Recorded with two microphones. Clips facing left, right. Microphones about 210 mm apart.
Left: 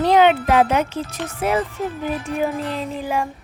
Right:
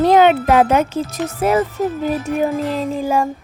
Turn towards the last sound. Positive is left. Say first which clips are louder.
# right 6 dB
turn(degrees=-45)  # may be behind; listen again after turning